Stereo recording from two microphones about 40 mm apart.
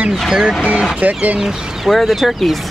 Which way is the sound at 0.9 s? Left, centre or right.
Right.